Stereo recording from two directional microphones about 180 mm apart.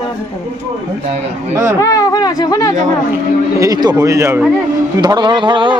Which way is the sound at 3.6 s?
20° right (ahead or behind).